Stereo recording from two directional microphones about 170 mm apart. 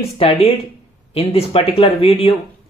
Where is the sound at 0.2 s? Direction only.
35° left (ahead or behind).